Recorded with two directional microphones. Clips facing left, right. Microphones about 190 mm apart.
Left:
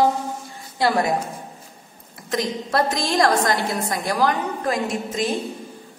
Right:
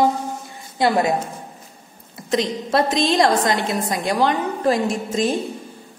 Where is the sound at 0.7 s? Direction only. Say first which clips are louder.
Right 2 dB; 20° right (ahead or behind).